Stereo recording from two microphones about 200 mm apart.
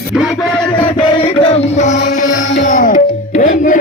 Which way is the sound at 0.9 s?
25° left (ahead or behind).